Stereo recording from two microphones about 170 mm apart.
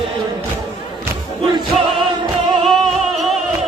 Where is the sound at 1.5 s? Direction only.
30° right (ahead or behind).